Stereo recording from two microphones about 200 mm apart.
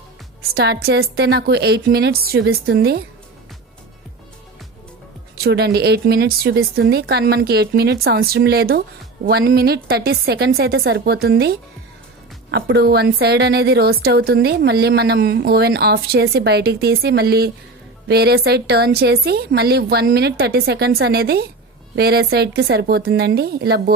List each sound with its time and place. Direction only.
0.5 s a woman's voice: 55° right (ahead or behind)
5.4 s a woman's voice: 55° right (ahead or behind)